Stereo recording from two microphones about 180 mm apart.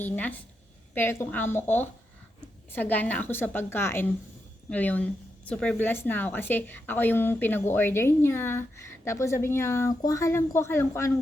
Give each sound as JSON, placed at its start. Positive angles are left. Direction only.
{"t": 0.0, "sound": "a woman's voice", "side_deg": 10}